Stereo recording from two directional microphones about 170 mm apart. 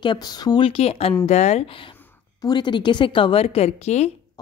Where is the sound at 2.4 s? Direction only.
25° left (ahead or behind).